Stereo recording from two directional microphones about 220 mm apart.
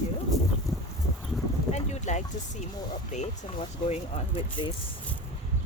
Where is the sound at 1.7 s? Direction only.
30° left (ahead or behind).